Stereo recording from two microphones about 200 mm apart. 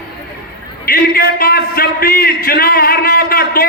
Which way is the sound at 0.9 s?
50° left (ahead or behind).